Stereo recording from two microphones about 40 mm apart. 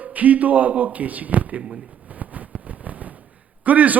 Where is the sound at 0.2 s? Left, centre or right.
Right.